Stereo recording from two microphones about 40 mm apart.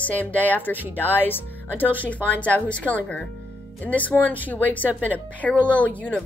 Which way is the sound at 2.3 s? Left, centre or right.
Left.